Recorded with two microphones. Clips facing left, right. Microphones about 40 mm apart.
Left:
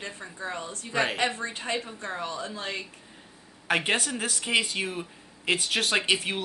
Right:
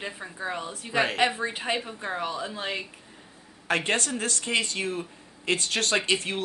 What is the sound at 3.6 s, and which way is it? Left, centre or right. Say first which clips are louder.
Speech: even; centre.